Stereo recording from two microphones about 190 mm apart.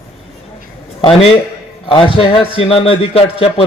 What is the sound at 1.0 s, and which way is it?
A man's voice, 30° left (ahead or behind).